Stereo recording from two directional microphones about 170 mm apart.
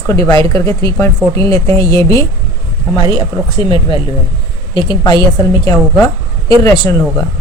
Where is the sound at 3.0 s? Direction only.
30° left (ahead or behind).